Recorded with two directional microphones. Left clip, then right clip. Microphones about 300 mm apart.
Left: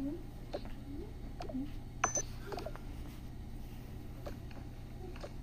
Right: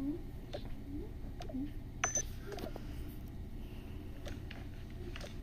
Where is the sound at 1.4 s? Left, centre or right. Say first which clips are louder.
Left 1 dB; centre.